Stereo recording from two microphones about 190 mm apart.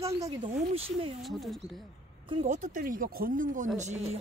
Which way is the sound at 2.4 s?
40° right (ahead or behind).